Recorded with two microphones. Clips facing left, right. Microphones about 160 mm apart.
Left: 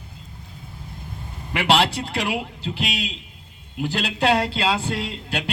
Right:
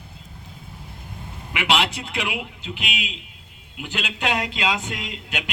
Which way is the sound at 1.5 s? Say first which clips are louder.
Left 3 dB; 35° left (ahead or behind).